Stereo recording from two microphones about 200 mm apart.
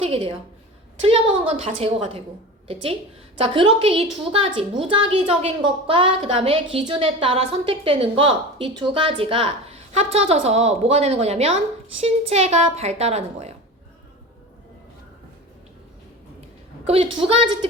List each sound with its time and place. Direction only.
0.0 s a woman's voice: 25° right (ahead or behind)
16.8 s a woman's voice: 30° right (ahead or behind)